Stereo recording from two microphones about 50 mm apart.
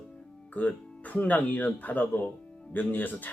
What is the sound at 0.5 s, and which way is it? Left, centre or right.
Speech, left.